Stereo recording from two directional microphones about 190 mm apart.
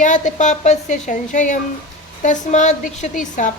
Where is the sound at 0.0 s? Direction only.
40° left (ahead or behind).